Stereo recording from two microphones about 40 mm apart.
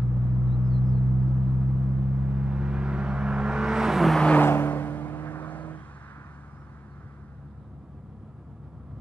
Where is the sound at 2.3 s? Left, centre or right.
Right; by 4.1 s centre.